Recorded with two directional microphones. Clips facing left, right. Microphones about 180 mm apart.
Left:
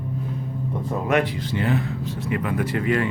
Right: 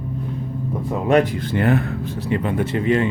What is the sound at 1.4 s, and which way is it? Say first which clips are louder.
Speech: right 5 dB; 55° right (ahead or behind).